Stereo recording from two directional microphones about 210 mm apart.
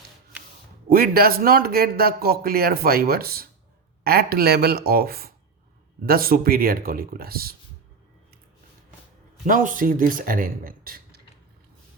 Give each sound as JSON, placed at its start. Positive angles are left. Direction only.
{"t": 0.9, "sound": "speech", "side_deg": -45}
{"t": 9.5, "sound": "speech", "side_deg": -40}